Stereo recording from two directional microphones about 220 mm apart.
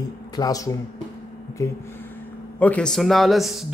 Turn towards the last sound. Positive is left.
turn(degrees=0)  # may be behind; listen again after turning